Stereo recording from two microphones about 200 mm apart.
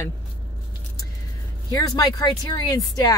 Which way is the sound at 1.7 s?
20° left (ahead or behind).